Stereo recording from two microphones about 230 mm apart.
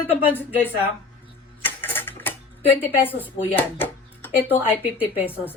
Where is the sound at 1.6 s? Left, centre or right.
Centre.